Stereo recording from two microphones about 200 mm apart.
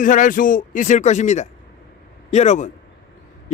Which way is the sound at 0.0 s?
40° left (ahead or behind).